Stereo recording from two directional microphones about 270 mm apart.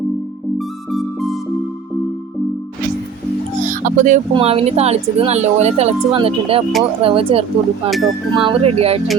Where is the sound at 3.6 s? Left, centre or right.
Right.